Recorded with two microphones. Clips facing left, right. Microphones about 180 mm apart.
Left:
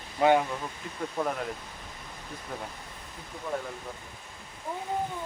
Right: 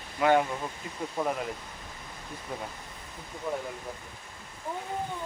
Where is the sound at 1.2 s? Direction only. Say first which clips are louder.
Right 1 dB; 5° right (ahead or behind).